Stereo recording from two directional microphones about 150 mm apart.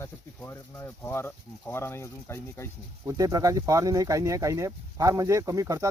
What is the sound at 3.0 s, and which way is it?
Speech, 25° right (ahead or behind).